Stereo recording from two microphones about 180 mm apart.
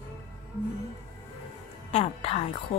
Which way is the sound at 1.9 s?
35° left (ahead or behind).